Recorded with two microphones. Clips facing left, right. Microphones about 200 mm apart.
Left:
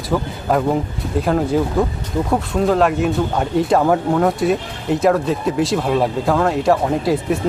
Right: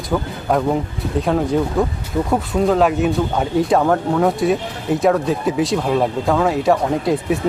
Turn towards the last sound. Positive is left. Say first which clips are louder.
# even
turn(degrees=0)  # may be behind; listen again after turning